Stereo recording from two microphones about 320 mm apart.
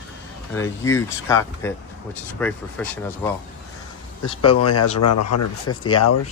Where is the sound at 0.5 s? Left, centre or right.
Centre.